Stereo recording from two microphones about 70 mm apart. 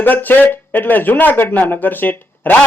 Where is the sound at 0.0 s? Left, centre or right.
Left.